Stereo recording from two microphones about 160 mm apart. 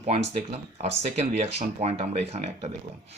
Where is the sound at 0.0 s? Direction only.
40° right (ahead or behind).